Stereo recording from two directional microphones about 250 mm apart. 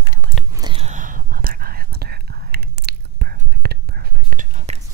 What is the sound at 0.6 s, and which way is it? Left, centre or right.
Whispering, centre.